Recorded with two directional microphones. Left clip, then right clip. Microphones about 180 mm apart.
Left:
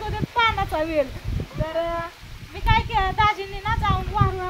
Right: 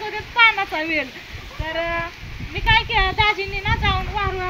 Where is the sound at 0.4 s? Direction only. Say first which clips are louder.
Right 5 dB; 15° left (ahead or behind).